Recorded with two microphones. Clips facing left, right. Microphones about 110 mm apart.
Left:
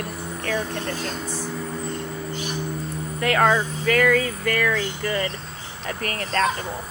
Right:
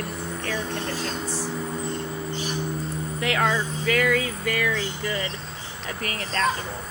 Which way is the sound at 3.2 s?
50° left (ahead or behind).